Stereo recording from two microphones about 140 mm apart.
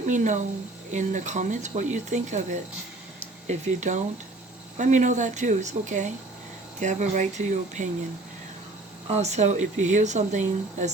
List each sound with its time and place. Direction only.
0.0 s speech: 60° right (ahead or behind)
9.0 s speech: 50° right (ahead or behind)